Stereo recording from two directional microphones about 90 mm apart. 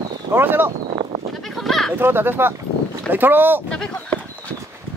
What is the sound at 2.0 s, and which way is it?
Speech, 25° right (ahead or behind).